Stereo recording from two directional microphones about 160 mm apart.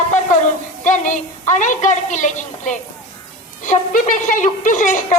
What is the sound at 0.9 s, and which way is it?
A woman's voice, 50° left (ahead or behind).